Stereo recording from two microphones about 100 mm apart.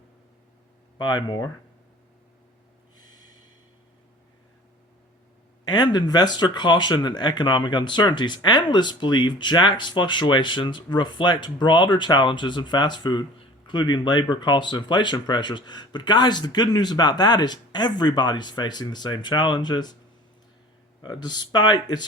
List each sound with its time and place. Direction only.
0.9 s speech: 45° left (ahead or behind)
3.0 s snort: 45° left (ahead or behind)
5.6 s speech: 45° left (ahead or behind)
21.0 s speech: 45° left (ahead or behind)